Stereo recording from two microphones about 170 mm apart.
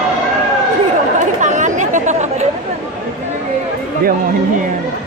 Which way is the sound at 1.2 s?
45° right (ahead or behind).